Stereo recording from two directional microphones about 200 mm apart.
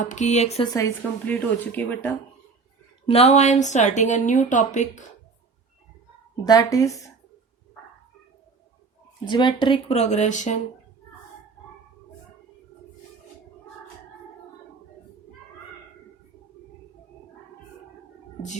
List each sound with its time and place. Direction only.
0.0 s speech: 40° left (ahead or behind)
0.7 s speech: 15° left (ahead or behind)
3.1 s speech: 30° left (ahead or behind)
6.3 s speech: 20° left (ahead or behind)
9.2 s speech: 25° left (ahead or behind)